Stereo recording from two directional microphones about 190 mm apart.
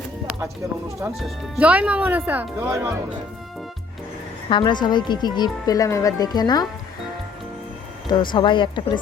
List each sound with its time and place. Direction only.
1.1 s speech: 5° right (ahead or behind)
4.4 s speech: 25° left (ahead or behind)
8.0 s speech: 25° left (ahead or behind)